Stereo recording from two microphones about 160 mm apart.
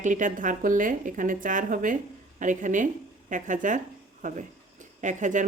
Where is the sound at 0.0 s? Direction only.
55° right (ahead or behind).